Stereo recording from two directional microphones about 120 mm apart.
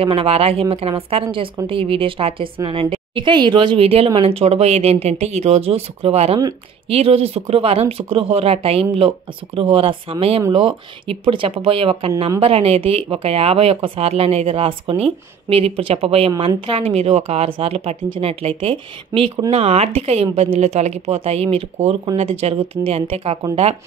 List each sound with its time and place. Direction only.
0.0 s speech: 50° right (ahead or behind)
20.5 s speech: 70° right (ahead or behind)